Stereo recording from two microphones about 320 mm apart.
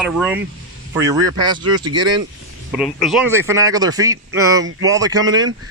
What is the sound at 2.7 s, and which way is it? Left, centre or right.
Speech, centre.